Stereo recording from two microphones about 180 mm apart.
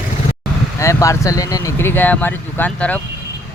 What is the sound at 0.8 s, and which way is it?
Speech, 15° left (ahead or behind).